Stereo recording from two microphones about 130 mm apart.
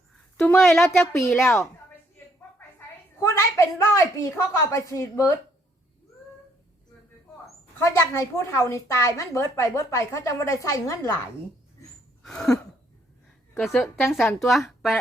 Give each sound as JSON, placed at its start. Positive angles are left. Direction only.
{"t": 0.3, "sound": "a woman's voice", "side_deg": 5}
{"t": 1.3, "sound": "a woman's voice", "side_deg": 20}
{"t": 2.6, "sound": "a sound", "side_deg": 20}
{"t": 4.7, "sound": "a woman's voice", "side_deg": 25}
{"t": 7.8, "sound": "a woman's voice", "side_deg": 25}
{"t": 12.2, "sound": "a sound", "side_deg": 5}
{"t": 13.7, "sound": "a woman's voice", "side_deg": 15}
{"t": 14.0, "sound": "a woman's voice", "side_deg": 0}